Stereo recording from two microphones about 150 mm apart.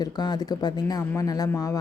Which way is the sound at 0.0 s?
25° left (ahead or behind).